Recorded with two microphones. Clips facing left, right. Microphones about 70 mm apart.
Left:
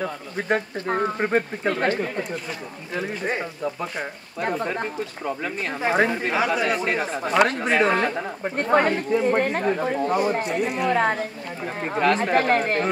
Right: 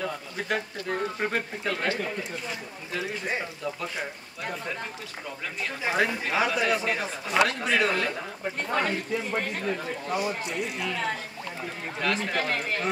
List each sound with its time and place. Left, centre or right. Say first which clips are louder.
0.0 s speech: left 4 dB; left
5.9 s speech: left 5 dB; left
11.6 s speech: left 9 dB; left